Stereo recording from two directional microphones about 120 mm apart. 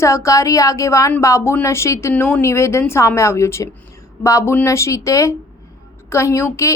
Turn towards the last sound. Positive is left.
turn(degrees=25)  # may be behind; listen again after turning